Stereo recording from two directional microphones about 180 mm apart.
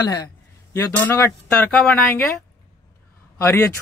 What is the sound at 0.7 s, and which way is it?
A man's voice, 15° left (ahead or behind).